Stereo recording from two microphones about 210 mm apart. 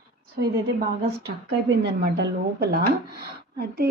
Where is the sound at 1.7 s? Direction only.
50° right (ahead or behind).